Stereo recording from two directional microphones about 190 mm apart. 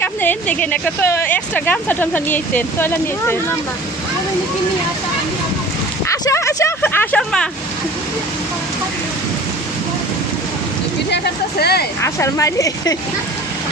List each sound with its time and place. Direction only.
0.0 s speech: 10° left (ahead or behind)
6.1 s a sound: 15° left (ahead or behind)
11.6 s speech: 55° left (ahead or behind)
12.0 s speech: 15° left (ahead or behind)